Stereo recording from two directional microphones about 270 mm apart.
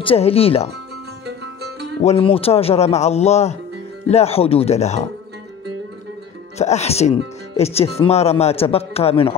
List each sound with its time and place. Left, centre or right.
0.0 s speech: left
1.2 s music: right
2.0 s speech: left
6.6 s speech: left